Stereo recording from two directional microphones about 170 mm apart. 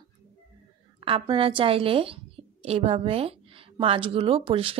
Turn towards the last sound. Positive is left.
turn(degrees=-35)  # may be behind; listen again after turning